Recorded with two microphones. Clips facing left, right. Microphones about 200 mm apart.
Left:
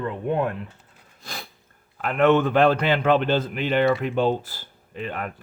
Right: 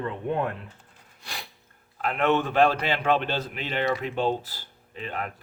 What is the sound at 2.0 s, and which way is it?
A man's voice, 50° left (ahead or behind).